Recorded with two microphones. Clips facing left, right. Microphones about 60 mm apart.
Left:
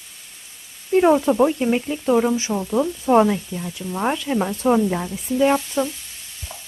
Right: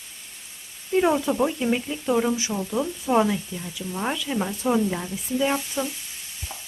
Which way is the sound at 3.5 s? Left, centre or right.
Left.